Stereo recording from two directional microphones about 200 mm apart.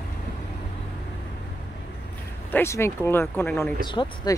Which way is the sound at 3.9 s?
25° left (ahead or behind).